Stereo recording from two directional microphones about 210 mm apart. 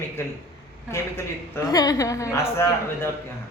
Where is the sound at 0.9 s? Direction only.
10° left (ahead or behind).